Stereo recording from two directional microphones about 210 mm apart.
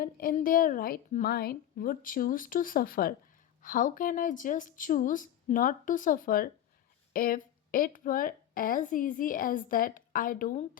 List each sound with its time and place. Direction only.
0.0 s a woman's voice: 45° left (ahead or behind)